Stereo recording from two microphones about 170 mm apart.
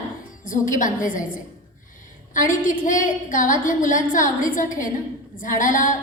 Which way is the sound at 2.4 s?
50° left (ahead or behind).